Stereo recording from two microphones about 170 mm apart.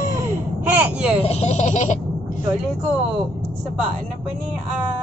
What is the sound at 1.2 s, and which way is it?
Speech, 40° left (ahead or behind).